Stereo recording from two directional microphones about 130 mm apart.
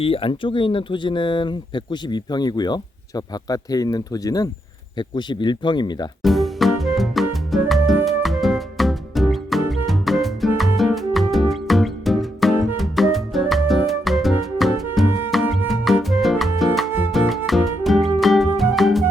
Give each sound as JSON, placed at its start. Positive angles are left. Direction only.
{"t": 0.0, "sound": "speech", "side_deg": 45}
{"t": 6.2, "sound": "music", "side_deg": 0}